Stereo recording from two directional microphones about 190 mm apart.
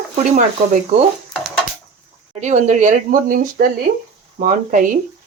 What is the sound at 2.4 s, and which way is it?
A woman's voice, 40° right (ahead or behind).